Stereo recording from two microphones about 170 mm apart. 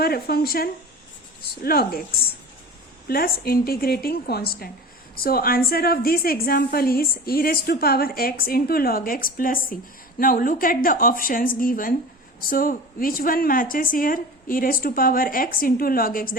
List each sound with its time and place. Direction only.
0.0 s a woman's voice: 65° left (ahead or behind)
3.1 s a woman's voice: 60° left (ahead or behind)